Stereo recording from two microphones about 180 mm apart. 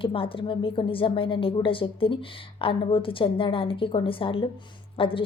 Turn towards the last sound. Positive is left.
turn(degrees=30)  # may be behind; listen again after turning